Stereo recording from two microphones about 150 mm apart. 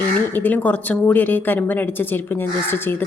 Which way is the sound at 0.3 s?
10° left (ahead or behind).